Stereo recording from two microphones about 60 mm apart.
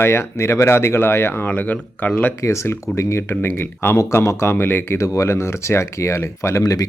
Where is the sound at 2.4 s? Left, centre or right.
Left.